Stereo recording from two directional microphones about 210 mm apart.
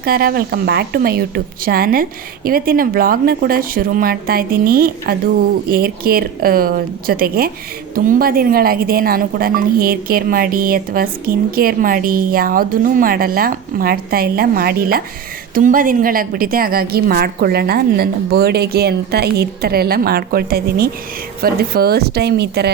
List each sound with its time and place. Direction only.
0.0 s speech: 45° right (ahead or behind)